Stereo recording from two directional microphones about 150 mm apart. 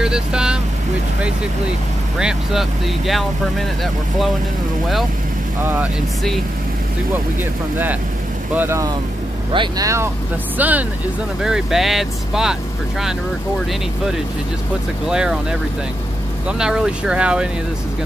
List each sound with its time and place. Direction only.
0.0 s vehicle: 5° right (ahead or behind)
2.1 s speech: 5° right (ahead or behind)
5.6 s speech: 10° right (ahead or behind)
7.7 s speech: 10° right (ahead or behind)
9.5 s speech: 35° right (ahead or behind)
10.6 s speech: 10° right (ahead or behind)
15.0 s speech: 5° right (ahead or behind)
16.4 s speech: 5° right (ahead or behind)